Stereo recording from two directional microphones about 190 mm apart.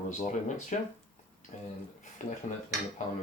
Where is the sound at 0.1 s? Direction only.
40° left (ahead or behind).